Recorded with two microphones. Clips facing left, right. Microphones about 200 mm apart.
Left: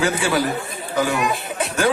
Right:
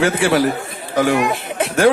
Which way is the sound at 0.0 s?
55° right (ahead or behind).